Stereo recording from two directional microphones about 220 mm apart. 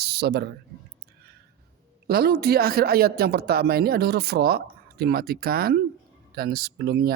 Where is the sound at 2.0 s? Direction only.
45° right (ahead or behind).